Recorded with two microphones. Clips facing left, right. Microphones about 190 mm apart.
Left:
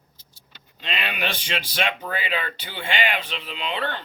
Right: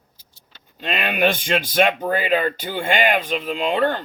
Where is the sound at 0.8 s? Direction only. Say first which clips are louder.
Right 9 dB; 50° right (ahead or behind).